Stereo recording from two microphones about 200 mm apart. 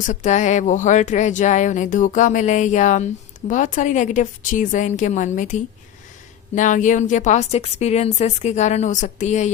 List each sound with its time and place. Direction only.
0.0 s speech: 35° left (ahead or behind)